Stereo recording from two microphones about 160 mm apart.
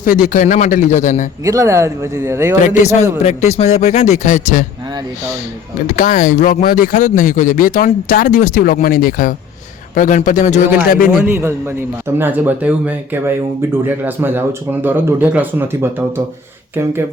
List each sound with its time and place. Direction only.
0.0 s speech: 60° left (ahead or behind)
1.5 s a man's voice: 20° right (ahead or behind)
2.6 s speech: 50° left (ahead or behind)
6.0 s speech: 55° left (ahead or behind)
9.9 s speech: 55° left (ahead or behind)
10.8 s speech: 65° left (ahead or behind)
11.3 s a man's voice: 15° right (ahead or behind)